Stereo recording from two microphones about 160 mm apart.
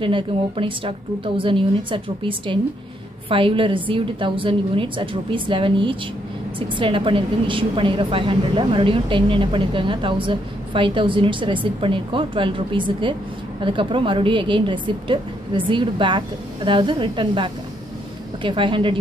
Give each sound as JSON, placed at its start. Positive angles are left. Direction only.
{"t": 0.0, "sound": "a woman's voice", "side_deg": -30}